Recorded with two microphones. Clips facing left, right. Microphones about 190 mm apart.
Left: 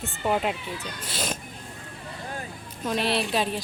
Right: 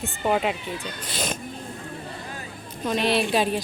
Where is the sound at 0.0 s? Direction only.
5° right (ahead or behind).